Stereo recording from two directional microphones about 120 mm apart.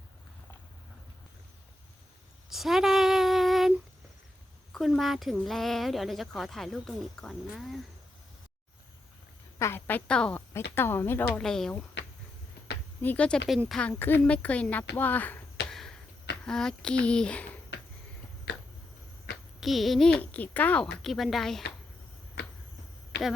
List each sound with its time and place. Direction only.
2.5 s a sound: centre (ahead or behind)
4.7 s speech: centre (ahead or behind)
9.6 s a woman's voice: 20° left (ahead or behind)
10.5 s speech: 20° left (ahead or behind)
11.3 s speech: 5° left (ahead or behind)
13.0 s speech: 10° left (ahead or behind)
15.7 s a sound: centre (ahead or behind)
16.5 s speech: 5° left (ahead or behind)
19.5 s speech: centre (ahead or behind)